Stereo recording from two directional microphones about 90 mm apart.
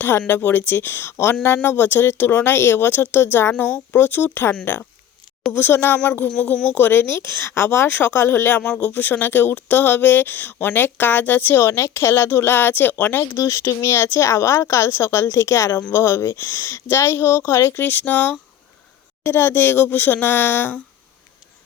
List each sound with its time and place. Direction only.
0.0 s speech: 25° left (ahead or behind)
13.3 s speech: 40° left (ahead or behind); by 20.8 s 20° left (ahead or behind)